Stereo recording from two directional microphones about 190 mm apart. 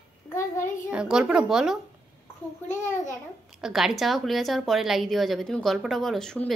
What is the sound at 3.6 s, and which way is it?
A woman's voice, centre (ahead or behind).